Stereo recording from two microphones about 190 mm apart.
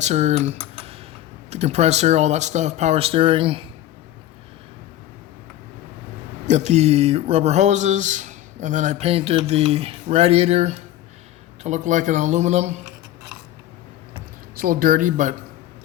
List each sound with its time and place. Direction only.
0.0 s speech: 35° right (ahead or behind)
6.5 s speech: 35° right (ahead or behind)
14.5 s speech: 50° right (ahead or behind)